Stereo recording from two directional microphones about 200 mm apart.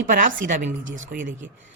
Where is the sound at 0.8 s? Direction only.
75° right (ahead or behind).